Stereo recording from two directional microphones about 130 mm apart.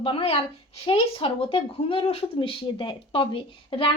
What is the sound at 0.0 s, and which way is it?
A child's voice, 45° left (ahead or behind).